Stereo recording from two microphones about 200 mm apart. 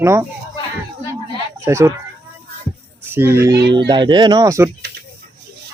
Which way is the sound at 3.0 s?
10° right (ahead or behind).